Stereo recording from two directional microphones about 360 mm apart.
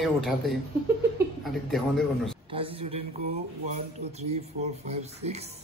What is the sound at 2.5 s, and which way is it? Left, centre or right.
Speech, centre.